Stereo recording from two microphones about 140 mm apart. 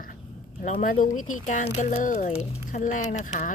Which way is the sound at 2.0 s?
65° left (ahead or behind).